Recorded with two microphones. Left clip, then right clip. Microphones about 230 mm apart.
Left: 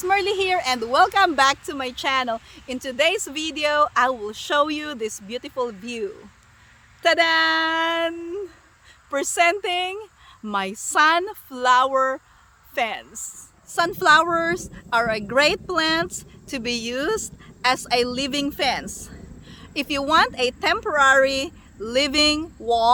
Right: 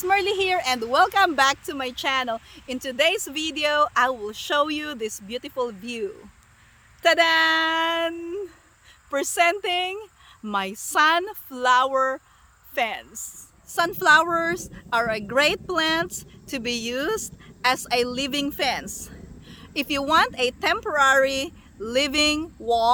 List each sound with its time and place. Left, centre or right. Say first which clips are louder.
0.0 s a woman's voice: left 1 dB; centre